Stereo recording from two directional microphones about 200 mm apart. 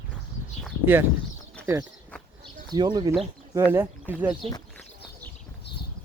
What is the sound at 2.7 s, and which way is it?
Speech, 20° right (ahead or behind).